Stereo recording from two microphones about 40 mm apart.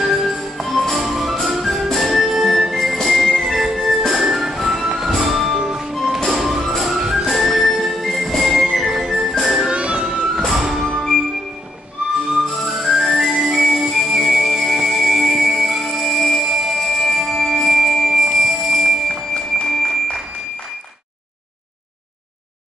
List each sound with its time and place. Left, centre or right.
0.0 s music: centre
5.6 s music: centre
5.9 s music: centre
7.8 s music: centre
9.7 s music: right
10.3 s music: centre
12.8 s music: centre